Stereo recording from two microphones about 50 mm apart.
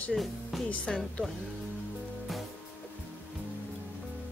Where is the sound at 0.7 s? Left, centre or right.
Left.